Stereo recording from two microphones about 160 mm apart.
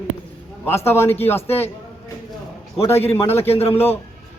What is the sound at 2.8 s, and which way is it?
A man's voice, 15° left (ahead or behind).